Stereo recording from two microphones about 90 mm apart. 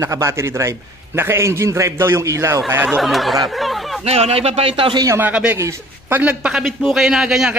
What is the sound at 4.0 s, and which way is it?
Speech, 90° right.